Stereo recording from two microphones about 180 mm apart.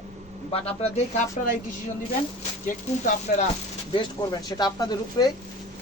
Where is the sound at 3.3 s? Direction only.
55° left (ahead or behind).